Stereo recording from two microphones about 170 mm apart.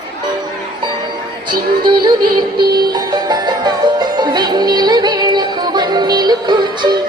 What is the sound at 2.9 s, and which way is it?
Music, 25° right (ahead or behind).